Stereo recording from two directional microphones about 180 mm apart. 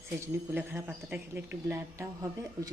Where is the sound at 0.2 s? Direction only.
10° right (ahead or behind).